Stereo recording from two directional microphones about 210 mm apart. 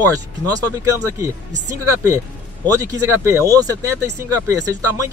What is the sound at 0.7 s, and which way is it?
Speech, 15° right (ahead or behind).